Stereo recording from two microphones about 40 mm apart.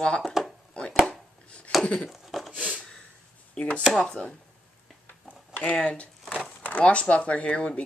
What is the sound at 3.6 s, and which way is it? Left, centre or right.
Speech, left.